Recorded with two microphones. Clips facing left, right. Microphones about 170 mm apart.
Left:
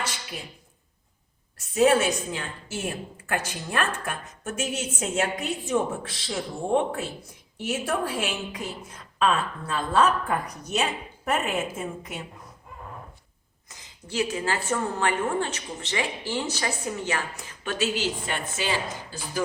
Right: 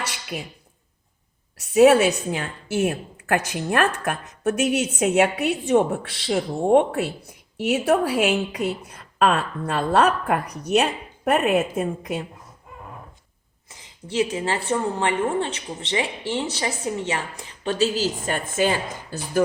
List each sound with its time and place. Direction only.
0.3 s a woman's voice: 65° right (ahead or behind)
1.7 s a woman's voice: 70° right (ahead or behind)
13.7 s a woman's voice: 25° right (ahead or behind); by 19.4 s 50° right (ahead or behind)